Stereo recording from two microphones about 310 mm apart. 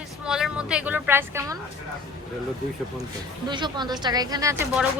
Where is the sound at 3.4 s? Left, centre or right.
Centre.